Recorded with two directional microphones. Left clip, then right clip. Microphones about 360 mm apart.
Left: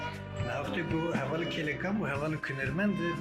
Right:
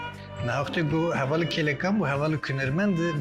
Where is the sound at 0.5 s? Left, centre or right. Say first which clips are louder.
Right 7 dB; right.